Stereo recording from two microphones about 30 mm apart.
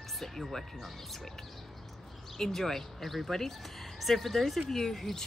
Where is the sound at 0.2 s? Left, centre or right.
Centre.